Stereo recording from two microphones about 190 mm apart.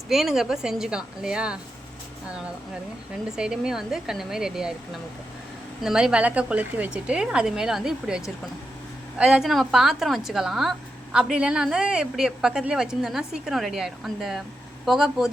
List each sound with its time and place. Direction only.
0.1 s a woman's voice: centre (ahead or behind)
3.3 s a woman's voice: 5° right (ahead or behind)
5.8 s a woman's voice: 5° right (ahead or behind)